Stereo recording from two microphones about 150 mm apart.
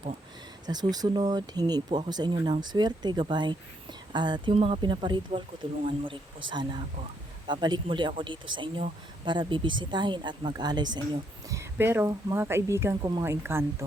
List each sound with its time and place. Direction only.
0.7 s speech: 25° right (ahead or behind)
11.4 s a woman's voice: 20° right (ahead or behind)
13.2 s a woman's voice: 15° right (ahead or behind)